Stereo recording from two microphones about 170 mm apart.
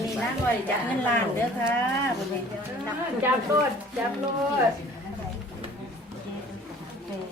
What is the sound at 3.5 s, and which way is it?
Speech, 20° right (ahead or behind).